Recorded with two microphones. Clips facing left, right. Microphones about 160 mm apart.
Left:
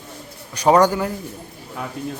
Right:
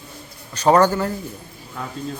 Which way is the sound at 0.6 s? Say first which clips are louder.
Even; 15° left (ahead or behind).